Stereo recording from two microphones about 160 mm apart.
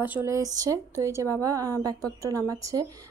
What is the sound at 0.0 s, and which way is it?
A woman's voice, 10° right (ahead or behind).